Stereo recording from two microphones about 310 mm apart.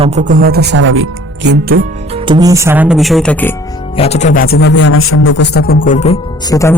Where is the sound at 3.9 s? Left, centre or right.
Centre.